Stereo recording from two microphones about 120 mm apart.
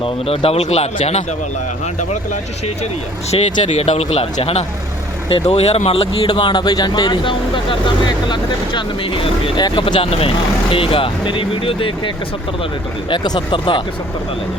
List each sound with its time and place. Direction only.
0.0 s speech: 55° left (ahead or behind)
3.3 s speech: 45° left (ahead or behind)
3.7 s speech: 65° left (ahead or behind); by 13.8 s 45° left (ahead or behind)